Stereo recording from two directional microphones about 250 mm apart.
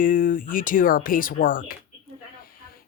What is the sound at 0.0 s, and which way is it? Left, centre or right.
Speech, left.